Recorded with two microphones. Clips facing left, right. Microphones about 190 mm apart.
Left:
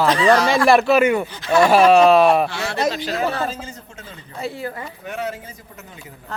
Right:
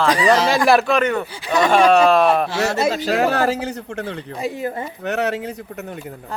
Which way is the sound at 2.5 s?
40° right (ahead or behind).